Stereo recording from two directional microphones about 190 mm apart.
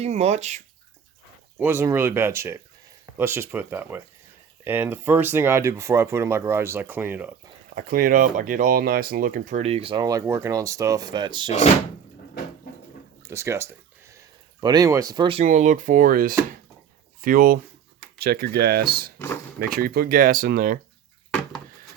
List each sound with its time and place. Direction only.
0.0 s speech: 35° right (ahead or behind)
1.5 s speech: 10° right (ahead or behind)
7.8 s speech: 50° right (ahead or behind); by 11.5 s 25° right (ahead or behind)
13.2 s speech: 15° right (ahead or behind)
15.4 s speech: 40° right (ahead or behind)